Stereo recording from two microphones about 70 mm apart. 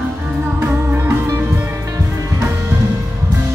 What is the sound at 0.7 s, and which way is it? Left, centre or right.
Music, right.